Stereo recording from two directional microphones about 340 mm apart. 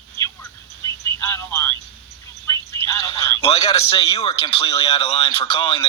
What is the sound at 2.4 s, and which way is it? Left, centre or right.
Speech, centre.